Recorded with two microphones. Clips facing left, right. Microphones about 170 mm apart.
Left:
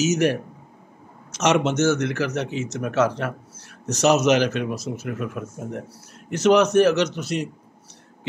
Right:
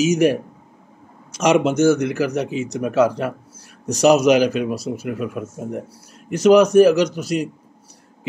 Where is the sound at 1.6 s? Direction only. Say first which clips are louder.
Right 5 dB; 30° right (ahead or behind).